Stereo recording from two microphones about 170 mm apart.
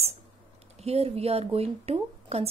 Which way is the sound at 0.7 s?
35° right (ahead or behind).